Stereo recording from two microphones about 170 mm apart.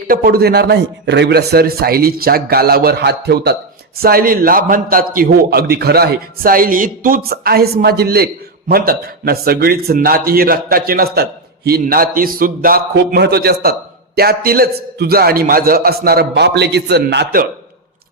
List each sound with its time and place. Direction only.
0.1 s a man's voice: 60° right (ahead or behind); by 17.4 s 80° right